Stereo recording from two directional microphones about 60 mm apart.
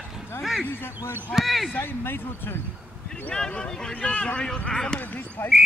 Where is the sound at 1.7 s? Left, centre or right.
Left.